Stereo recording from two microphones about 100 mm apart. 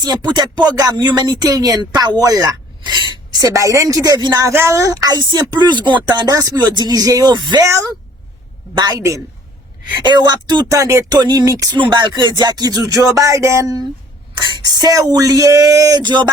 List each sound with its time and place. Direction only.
0.0 s speech: 45° right (ahead or behind)
4.5 s speech: 30° right (ahead or behind); by 6.3 s 50° right (ahead or behind)
6.3 s speech: 35° right (ahead or behind)
7.6 s speech: 30° right (ahead or behind)
8.7 s speech: 45° right (ahead or behind)
9.0 s speech: 30° right (ahead or behind)
10.0 s speech: 45° right (ahead or behind)
10.8 s speech: 30° right (ahead or behind)
11.1 s speech: 40° right (ahead or behind)
11.7 s speech: 50° right (ahead or behind)
14.3 s speech: 45° right (ahead or behind)